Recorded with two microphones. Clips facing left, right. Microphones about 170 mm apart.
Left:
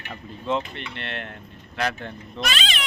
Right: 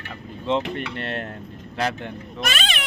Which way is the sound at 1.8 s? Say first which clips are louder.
Right 2 dB; 20° right (ahead or behind).